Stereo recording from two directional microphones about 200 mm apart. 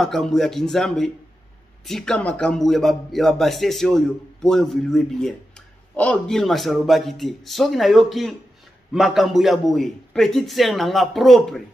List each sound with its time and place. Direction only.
0.0 s a man's voice: centre (ahead or behind)